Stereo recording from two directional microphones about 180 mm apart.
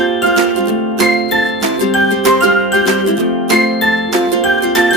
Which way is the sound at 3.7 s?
Centre (ahead or behind).